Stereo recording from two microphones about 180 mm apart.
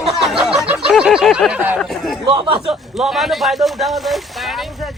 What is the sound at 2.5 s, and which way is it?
Speech, 5° right (ahead or behind).